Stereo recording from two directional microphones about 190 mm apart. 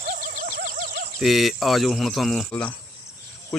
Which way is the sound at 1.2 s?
Centre (ahead or behind).